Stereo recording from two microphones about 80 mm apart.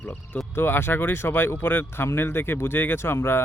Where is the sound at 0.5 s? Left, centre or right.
Left.